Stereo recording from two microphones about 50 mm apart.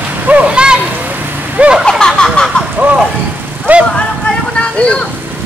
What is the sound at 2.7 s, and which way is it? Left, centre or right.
Rain, right.